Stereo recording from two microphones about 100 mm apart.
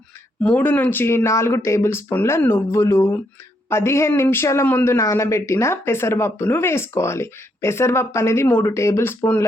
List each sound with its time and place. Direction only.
0.4 s speech: 15° left (ahead or behind)